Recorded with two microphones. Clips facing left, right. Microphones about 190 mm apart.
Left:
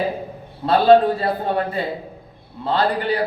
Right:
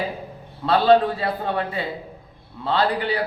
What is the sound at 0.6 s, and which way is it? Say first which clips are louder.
A man's voice: left 3 dB; 45° left (ahead or behind).